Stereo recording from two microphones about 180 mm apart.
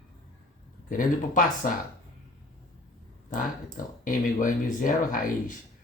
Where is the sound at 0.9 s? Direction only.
45° left (ahead or behind).